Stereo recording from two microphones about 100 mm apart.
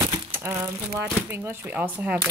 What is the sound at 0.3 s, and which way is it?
Speech, 25° right (ahead or behind).